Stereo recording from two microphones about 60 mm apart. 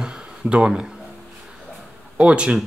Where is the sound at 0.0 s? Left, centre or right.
Centre.